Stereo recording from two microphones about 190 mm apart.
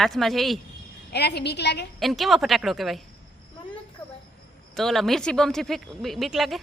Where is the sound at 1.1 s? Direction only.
60° left (ahead or behind).